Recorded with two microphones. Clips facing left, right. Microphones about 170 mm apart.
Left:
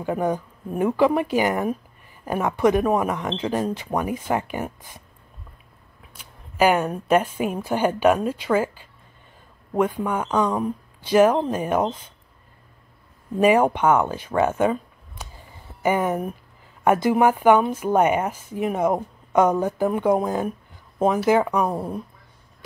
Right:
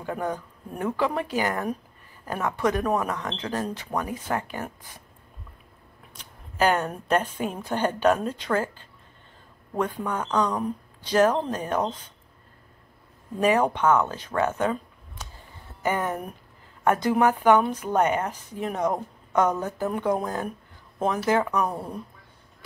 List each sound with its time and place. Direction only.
0.0 s speech: 15° left (ahead or behind)
6.1 s speech: 10° left (ahead or behind)
13.4 s speech: 10° left (ahead or behind)
21.6 s speech: 25° left (ahead or behind)